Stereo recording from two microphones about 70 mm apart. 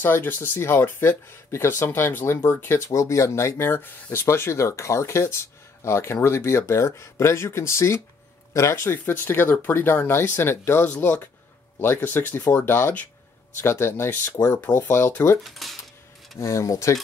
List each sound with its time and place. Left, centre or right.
0.0 s speech: left
2.9 s speech: left
10.9 s speech: left
14.5 s speech: left
15.4 s speech: centre
16.3 s speech: left